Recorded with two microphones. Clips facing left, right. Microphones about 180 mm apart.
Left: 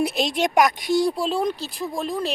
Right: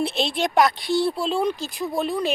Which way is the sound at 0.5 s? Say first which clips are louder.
Right 1 dB; 15° left (ahead or behind).